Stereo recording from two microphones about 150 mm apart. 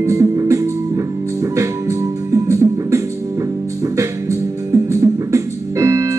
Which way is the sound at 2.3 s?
20° right (ahead or behind).